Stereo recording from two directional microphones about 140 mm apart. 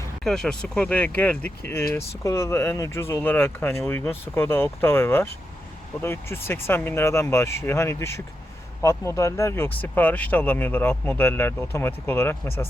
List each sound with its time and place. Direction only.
0.3 s speech: 5° left (ahead or behind)